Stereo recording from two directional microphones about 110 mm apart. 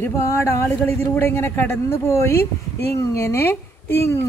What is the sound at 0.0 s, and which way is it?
Speech, 25° left (ahead or behind).